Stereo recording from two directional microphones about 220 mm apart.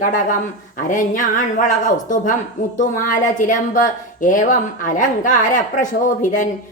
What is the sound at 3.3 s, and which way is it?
A woman's voice, 35° left (ahead or behind).